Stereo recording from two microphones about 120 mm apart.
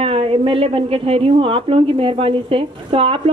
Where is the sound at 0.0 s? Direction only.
50° right (ahead or behind).